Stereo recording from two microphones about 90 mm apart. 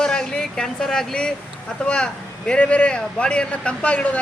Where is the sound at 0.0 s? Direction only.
5° left (ahead or behind).